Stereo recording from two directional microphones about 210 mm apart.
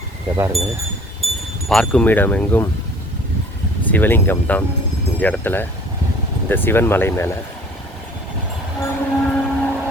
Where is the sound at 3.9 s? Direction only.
10° left (ahead or behind).